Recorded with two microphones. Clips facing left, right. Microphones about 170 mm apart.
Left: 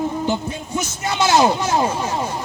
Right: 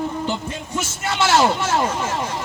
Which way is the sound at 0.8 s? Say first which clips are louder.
Left 1 dB; 15° left (ahead or behind).